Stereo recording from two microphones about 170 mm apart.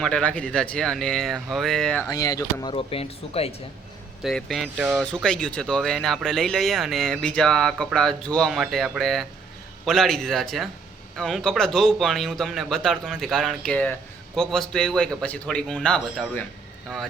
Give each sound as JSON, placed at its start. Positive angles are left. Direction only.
{"t": 0.0, "sound": "speech", "side_deg": 5}
{"t": 2.0, "sound": "speech", "side_deg": 20}
{"t": 2.7, "sound": "speech", "side_deg": 35}
{"t": 4.2, "sound": "speech", "side_deg": 0}